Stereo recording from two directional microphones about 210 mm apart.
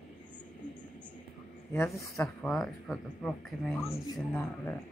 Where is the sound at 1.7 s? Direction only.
15° left (ahead or behind).